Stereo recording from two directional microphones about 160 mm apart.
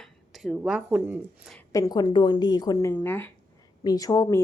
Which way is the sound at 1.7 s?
20° left (ahead or behind).